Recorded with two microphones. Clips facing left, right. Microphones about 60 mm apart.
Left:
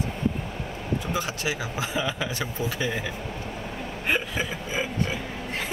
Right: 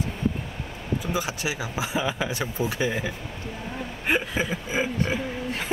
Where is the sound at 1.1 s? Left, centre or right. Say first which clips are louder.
Even; centre.